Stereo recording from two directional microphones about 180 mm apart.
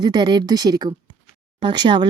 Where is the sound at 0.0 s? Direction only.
25° right (ahead or behind).